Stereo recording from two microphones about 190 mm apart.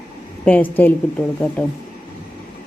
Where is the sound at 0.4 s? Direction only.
10° left (ahead or behind).